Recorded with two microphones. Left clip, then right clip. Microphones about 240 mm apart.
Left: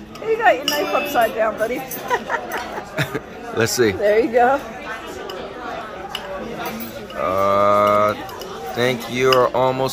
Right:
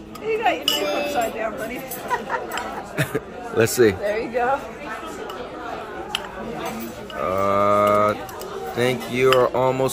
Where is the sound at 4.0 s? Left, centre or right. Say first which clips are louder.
Left 8 dB; left.